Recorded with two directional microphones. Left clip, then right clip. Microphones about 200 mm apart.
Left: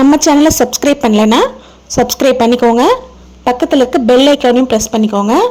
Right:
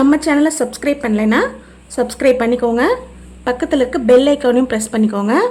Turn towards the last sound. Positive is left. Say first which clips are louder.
# left 5 dB
turn(degrees=10)  # may be behind; listen again after turning